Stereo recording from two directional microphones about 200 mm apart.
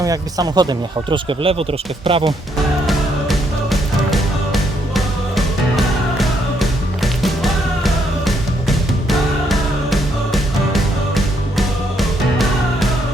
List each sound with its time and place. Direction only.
0.0 s speech: 15° right (ahead or behind)
2.8 s music: centre (ahead or behind)